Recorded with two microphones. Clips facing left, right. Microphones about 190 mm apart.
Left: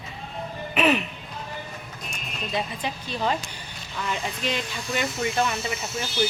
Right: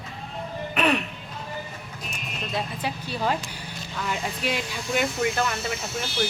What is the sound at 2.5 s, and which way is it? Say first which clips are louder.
Speech: left 1 dB; 5° right (ahead or behind).